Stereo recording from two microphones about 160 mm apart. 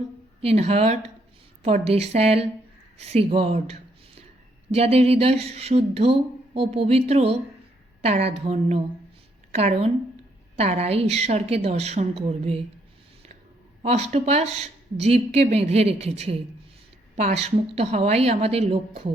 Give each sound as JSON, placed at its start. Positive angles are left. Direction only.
{"t": 0.4, "sound": "speech", "side_deg": -40}
{"t": 13.8, "sound": "speech", "side_deg": -40}
{"t": 17.3, "sound": "speech", "side_deg": -40}